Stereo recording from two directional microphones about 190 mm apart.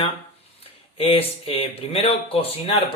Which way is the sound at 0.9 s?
30° left (ahead or behind).